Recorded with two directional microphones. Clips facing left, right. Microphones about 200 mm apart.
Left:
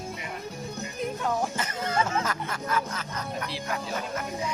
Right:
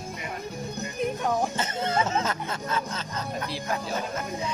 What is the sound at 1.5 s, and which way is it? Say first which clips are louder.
Speech: right 2 dB; 25° right (ahead or behind).